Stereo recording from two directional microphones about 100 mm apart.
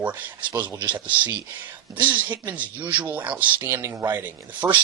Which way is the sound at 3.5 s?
25° right (ahead or behind).